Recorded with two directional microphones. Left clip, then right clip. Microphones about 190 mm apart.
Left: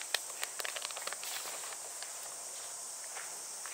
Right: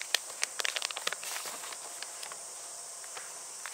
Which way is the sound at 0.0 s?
5° left (ahead or behind).